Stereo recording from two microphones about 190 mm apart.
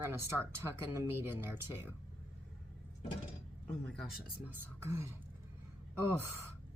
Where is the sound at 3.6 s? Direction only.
5° left (ahead or behind).